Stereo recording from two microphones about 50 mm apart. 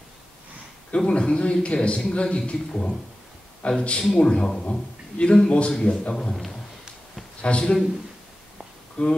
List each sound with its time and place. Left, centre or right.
0.9 s speech: centre
7.4 s speech: left
9.0 s speech: left